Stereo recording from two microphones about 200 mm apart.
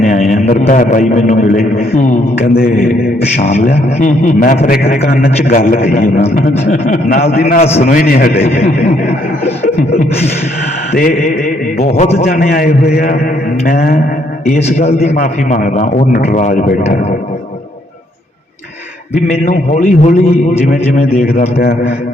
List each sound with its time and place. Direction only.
0.0 s a man's voice: 40° left (ahead or behind)
3.3 s a man's voice: 35° left (ahead or behind)
7.6 s a man's voice: 30° left (ahead or behind)
7.9 s a man's voice: 45° left (ahead or behind)
10.9 s a man's voice: 45° left (ahead or behind)
12.2 s a man's voice: 45° left (ahead or behind)
19.5 s a man's voice: 40° left (ahead or behind)